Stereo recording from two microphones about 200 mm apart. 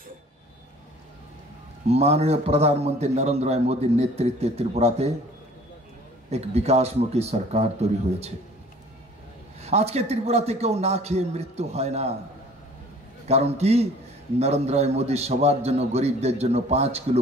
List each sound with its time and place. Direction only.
1.9 s a man's voice: 30° right (ahead or behind)
6.3 s a man's voice: 30° right (ahead or behind)
9.6 s a man's voice: 30° right (ahead or behind)
13.3 s a man's voice: 30° right (ahead or behind)